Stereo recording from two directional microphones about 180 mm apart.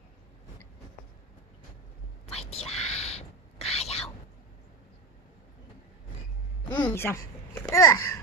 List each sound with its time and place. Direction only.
2.2 s whispering: 35° left (ahead or behind)
6.7 s a child's voice: 10° left (ahead or behind)